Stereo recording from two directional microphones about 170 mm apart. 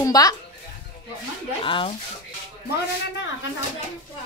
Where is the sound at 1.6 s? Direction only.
30° left (ahead or behind).